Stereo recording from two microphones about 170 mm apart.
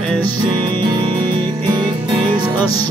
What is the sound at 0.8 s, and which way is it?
Music, 25° right (ahead or behind).